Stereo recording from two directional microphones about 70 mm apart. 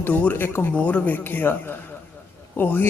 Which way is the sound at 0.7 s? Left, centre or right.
Left.